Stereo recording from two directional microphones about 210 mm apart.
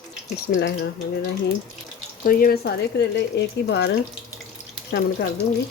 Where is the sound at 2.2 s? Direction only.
45° left (ahead or behind).